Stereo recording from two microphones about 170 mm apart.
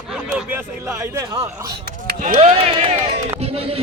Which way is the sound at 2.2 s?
45° right (ahead or behind).